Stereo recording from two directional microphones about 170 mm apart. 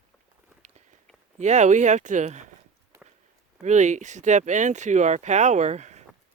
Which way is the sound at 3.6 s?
45° right (ahead or behind).